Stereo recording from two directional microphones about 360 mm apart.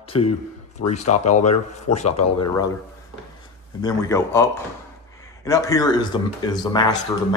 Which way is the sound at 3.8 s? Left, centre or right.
Centre.